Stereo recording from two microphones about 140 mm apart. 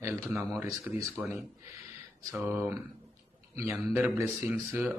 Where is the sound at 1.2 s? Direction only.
10° right (ahead or behind).